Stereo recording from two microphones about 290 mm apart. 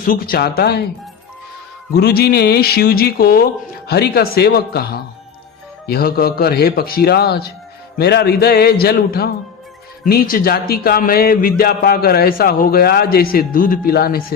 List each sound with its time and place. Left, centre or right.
0.0 s speech: left
1.9 s speech: left